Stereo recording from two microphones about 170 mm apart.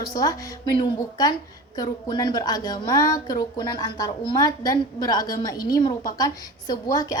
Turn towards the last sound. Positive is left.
turn(degrees=20)  # may be behind; listen again after turning